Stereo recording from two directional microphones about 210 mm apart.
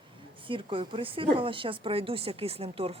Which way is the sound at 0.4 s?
25° right (ahead or behind).